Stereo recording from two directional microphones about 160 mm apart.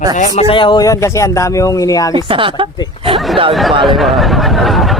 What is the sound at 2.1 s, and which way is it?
Speech, 30° right (ahead or behind).